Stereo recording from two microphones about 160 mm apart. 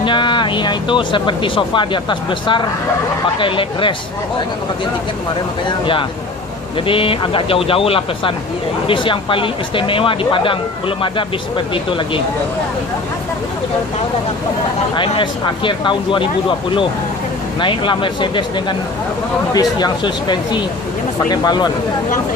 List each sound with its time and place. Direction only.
0.0 s speech: 30° left (ahead or behind)
5.6 s speech: 30° left (ahead or behind)
14.9 s speech: 30° left (ahead or behind)